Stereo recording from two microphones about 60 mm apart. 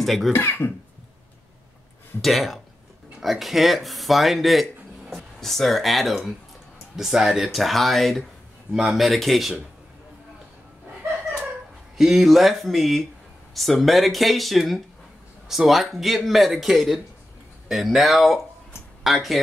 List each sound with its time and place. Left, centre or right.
0.0 s speech: centre
0.3 s speech: left
2.2 s a man's voice: centre
12.0 s a man's voice: centre